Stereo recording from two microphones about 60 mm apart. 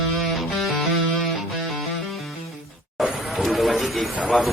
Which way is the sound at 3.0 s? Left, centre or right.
Centre.